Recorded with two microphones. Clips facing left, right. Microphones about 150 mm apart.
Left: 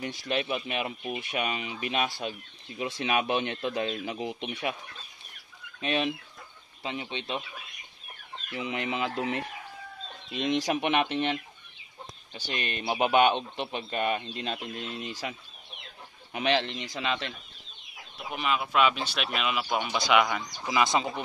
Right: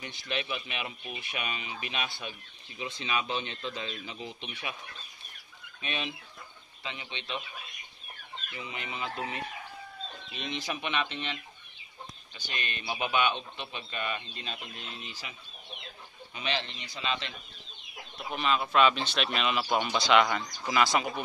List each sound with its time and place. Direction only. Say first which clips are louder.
0.3 s speech: left 5 dB; 45° left (ahead or behind)
2.8 s speech: left 5 dB; 65° left (ahead or behind)
5.8 s speech: left 8 dB; 55° left (ahead or behind)
8.5 s speech: left 8 dB; 70° left (ahead or behind)
10.4 s speech: left 9 dB; 80° left; by 11.3 s 55° left (ahead or behind)
12.5 s speech: left 6 dB; 55° left (ahead or behind)
16.3 s a man's voice: left 8 dB; 65° left (ahead or behind)
18.3 s speech: even; 10° left (ahead or behind)
20.6 s speech: left 1 dB; 20° left (ahead or behind)